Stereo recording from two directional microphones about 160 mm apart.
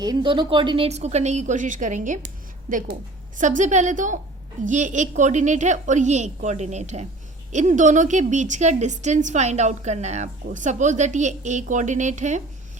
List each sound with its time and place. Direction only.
0.0 s a woman's voice: 25° right (ahead or behind); by 12.4 s 50° right (ahead or behind)